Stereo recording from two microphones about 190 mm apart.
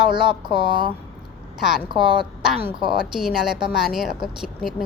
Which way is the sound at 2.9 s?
Centre (ahead or behind).